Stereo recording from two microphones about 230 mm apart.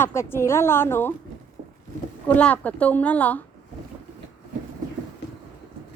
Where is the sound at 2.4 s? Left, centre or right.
Centre.